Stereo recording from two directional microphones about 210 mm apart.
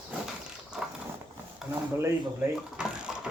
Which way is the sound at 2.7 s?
5° right (ahead or behind).